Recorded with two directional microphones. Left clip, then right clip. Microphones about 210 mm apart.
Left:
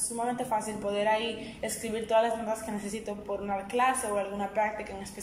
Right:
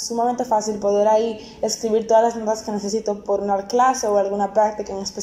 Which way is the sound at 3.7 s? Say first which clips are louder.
Right 10 dB; 25° right (ahead or behind).